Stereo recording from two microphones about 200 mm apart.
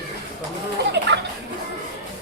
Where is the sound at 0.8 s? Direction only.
60° right (ahead or behind).